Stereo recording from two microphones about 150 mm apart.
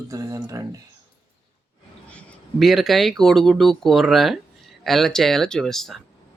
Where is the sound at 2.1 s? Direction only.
5° left (ahead or behind).